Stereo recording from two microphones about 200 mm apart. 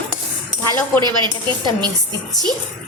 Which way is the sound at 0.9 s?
20° right (ahead or behind).